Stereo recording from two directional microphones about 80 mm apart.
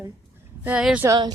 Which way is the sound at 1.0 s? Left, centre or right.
Right.